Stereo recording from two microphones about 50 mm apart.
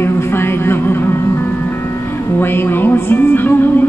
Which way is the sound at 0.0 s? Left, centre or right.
Left.